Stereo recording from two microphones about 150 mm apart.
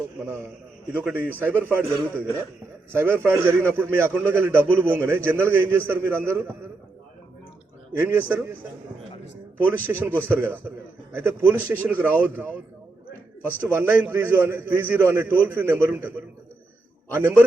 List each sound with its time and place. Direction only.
0.3 s a man's voice: 15° right (ahead or behind)
7.9 s a man's voice: 15° right (ahead or behind)
9.6 s a man's voice: 15° right (ahead or behind)
13.4 s a man's voice: 15° right (ahead or behind)